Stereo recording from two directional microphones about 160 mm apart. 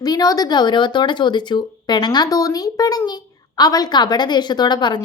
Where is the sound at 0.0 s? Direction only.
25° left (ahead or behind).